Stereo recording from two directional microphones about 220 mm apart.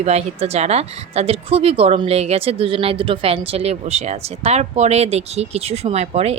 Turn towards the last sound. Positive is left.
turn(degrees=-30)  # may be behind; listen again after turning